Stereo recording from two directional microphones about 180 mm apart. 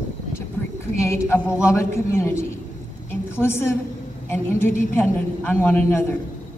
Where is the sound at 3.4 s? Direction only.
15° left (ahead or behind).